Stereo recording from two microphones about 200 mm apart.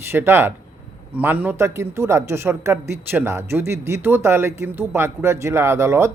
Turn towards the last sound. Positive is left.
turn(degrees=-15)  # may be behind; listen again after turning